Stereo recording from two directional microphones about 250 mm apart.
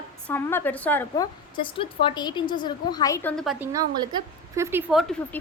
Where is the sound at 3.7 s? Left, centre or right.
Centre.